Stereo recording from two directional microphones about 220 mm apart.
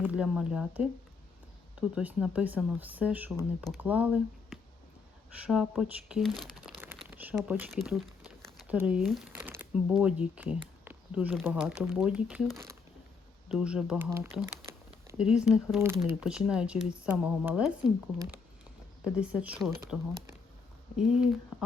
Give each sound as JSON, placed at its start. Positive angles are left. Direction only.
{"t": 0.0, "sound": "speech", "side_deg": -5}
{"t": 6.7, "sound": "crumpling", "side_deg": -10}
{"t": 10.0, "sound": "speech", "side_deg": -5}
{"t": 21.0, "sound": "speech", "side_deg": -5}